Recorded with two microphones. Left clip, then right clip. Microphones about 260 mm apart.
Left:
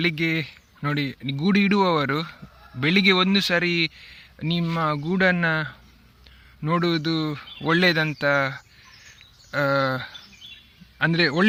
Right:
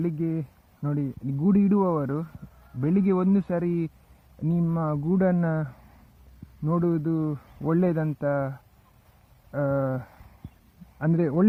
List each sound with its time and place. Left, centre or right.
0.0 s speech: left